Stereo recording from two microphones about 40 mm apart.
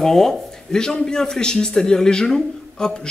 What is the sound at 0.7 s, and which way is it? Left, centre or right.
Speech, centre.